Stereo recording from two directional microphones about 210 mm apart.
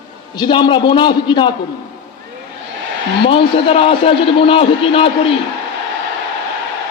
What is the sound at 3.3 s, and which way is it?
A man's voice, 25° left (ahead or behind).